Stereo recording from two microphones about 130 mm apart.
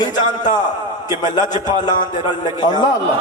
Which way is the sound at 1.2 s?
30° left (ahead or behind).